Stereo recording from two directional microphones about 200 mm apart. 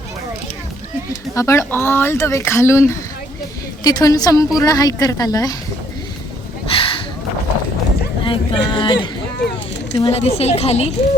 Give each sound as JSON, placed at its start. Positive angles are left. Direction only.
{"t": 1.4, "sound": "speech", "side_deg": 15}
{"t": 6.7, "sound": "a sound", "side_deg": 25}
{"t": 8.2, "sound": "a woman's voice", "side_deg": 25}